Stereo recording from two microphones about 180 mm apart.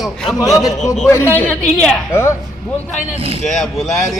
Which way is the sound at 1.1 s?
15° left (ahead or behind).